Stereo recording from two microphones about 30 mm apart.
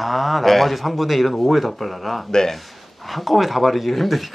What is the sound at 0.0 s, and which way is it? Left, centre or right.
A man's voice, centre.